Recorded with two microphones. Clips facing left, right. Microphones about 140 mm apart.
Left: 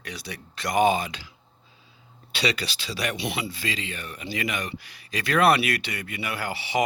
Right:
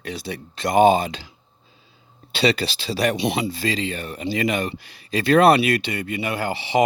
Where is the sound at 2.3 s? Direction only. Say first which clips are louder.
Right 7 dB; 30° right (ahead or behind).